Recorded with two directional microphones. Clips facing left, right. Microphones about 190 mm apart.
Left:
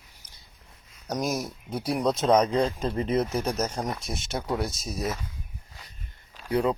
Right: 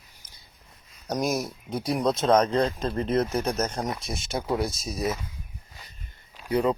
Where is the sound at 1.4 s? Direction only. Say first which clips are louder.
Right 1 dB; 5° left (ahead or behind).